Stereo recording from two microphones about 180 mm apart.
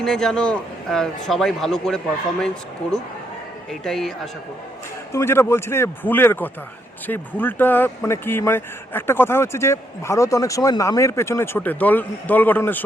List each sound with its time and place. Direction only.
0.0 s a man's voice: 5° left (ahead or behind)
3.7 s a man's voice: centre (ahead or behind)
5.1 s speech: 15° left (ahead or behind)